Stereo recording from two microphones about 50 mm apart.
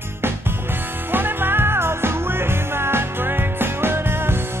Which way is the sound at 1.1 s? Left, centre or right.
Right.